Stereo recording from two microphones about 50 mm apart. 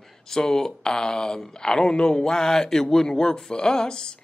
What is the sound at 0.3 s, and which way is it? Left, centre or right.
Speech, centre.